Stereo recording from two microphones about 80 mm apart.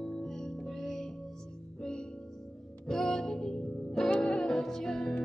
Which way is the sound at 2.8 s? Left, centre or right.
Centre.